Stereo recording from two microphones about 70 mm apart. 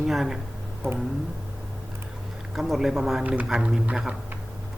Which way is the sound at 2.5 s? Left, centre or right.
Centre.